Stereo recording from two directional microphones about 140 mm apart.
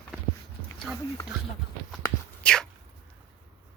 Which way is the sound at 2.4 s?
5° left (ahead or behind).